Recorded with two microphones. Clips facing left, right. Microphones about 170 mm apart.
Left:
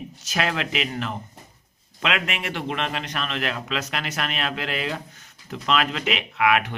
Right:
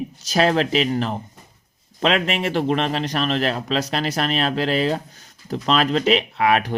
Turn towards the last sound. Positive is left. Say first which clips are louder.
# right 2 dB
turn(degrees=-35)  # may be behind; listen again after turning